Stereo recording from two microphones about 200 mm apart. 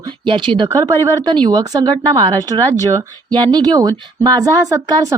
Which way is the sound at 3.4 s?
20° right (ahead or behind).